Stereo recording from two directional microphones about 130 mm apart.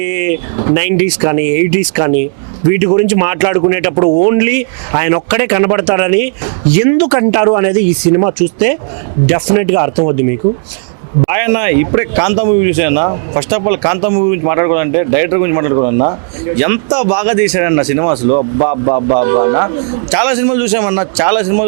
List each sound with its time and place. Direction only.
0.0 s a man's voice: 15° right (ahead or behind)
3.9 s speech: 30° right (ahead or behind)
4.3 s a man's voice: 15° right (ahead or behind)
11.3 s a man's voice: 15° right (ahead or behind)